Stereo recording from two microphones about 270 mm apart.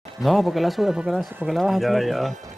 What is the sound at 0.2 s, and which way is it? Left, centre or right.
Speech, centre.